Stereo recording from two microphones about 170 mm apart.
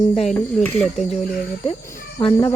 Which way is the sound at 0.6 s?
Centre (ahead or behind).